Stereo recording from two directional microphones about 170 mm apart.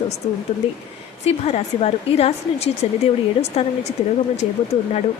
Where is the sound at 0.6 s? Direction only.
35° left (ahead or behind).